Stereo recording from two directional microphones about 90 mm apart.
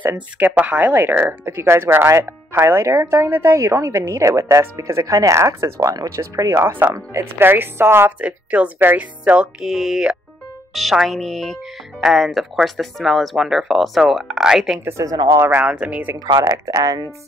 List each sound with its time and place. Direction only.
0.4 s speech: 20° right (ahead or behind)
8.2 s speech: 15° right (ahead or behind)
14.9 s speech: 35° right (ahead or behind)
15.4 s speech: 20° right (ahead or behind)
16.3 s speech: 40° right (ahead or behind)